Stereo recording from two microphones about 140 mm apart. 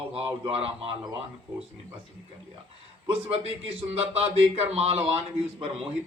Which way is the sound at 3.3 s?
45° right (ahead or behind).